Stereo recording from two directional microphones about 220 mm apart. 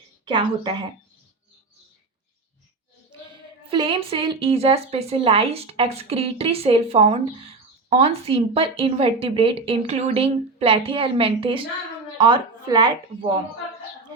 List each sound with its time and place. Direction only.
0.3 s a woman's voice: 20° right (ahead or behind)
3.7 s a woman's voice: 25° right (ahead or behind)